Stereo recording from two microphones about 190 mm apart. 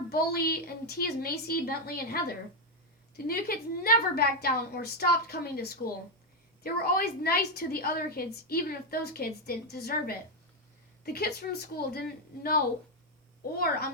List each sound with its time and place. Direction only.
0.1 s a woman's voice: 55° left (ahead or behind)